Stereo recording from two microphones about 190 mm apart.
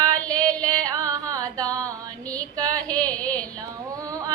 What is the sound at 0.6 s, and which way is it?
Carnatic music, 20° right (ahead or behind).